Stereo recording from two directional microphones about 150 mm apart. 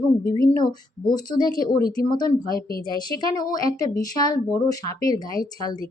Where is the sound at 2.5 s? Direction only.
80° left.